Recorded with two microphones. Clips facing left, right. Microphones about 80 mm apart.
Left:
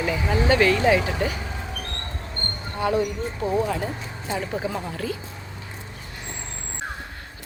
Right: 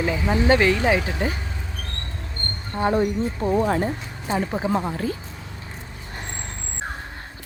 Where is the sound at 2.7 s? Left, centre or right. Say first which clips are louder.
Right 3 dB; right.